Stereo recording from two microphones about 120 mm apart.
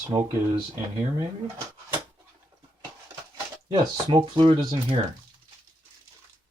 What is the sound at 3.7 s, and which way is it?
Speech, 45° right (ahead or behind).